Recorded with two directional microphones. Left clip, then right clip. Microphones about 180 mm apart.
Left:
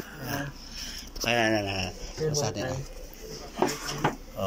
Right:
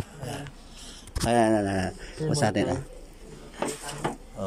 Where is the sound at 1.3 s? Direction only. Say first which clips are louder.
Right 3 dB; 30° right (ahead or behind); by 2.8 s 45° right (ahead or behind).